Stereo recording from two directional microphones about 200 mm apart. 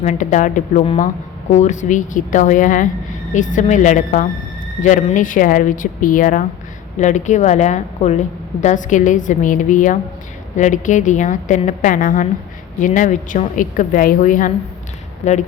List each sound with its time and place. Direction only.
0.0 s a woman's voice: 35° left (ahead or behind)